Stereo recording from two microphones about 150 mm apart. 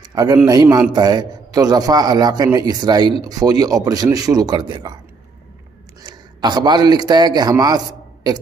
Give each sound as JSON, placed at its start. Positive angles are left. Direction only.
{"t": 0.0, "sound": "a sound", "side_deg": -25}
{"t": 0.5, "sound": "a man's voice", "side_deg": -25}
{"t": 6.0, "sound": "a man's voice", "side_deg": -30}